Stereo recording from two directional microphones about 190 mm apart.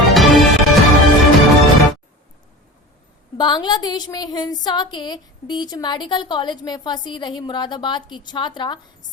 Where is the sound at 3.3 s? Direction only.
20° left (ahead or behind).